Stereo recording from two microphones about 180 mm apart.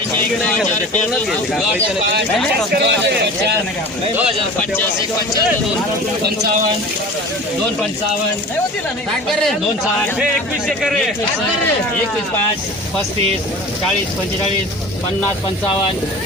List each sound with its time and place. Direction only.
2.8 s a man's voice: 70° right (ahead or behind)
10.7 s a man's voice: centre (ahead or behind)